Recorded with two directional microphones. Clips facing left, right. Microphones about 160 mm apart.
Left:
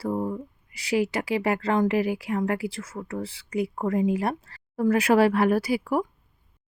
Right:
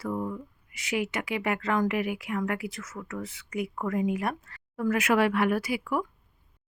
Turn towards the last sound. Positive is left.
turn(degrees=35)  # may be behind; listen again after turning